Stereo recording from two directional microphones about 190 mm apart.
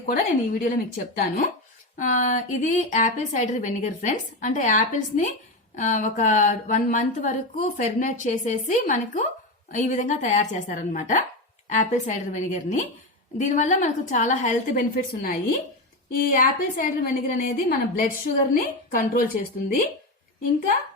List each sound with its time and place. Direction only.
0.1 s a woman's voice: 45° left (ahead or behind)